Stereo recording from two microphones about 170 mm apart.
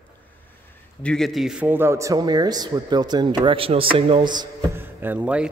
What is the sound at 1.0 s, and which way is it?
A man's voice, centre (ahead or behind).